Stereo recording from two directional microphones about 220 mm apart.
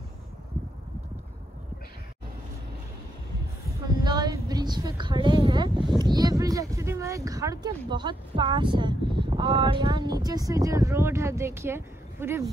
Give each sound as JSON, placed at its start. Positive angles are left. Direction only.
{"t": 3.8, "sound": "a woman's voice", "side_deg": -20}